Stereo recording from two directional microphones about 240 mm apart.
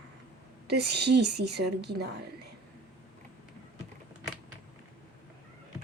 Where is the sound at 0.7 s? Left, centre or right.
Right.